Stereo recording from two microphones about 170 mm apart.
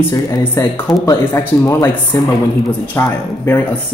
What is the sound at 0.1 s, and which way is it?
Speech, 15° left (ahead or behind).